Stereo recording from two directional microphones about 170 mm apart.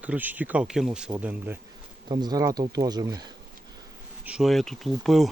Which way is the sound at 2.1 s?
25° right (ahead or behind).